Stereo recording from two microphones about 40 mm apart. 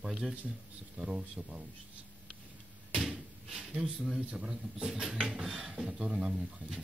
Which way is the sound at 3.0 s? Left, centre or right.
Centre.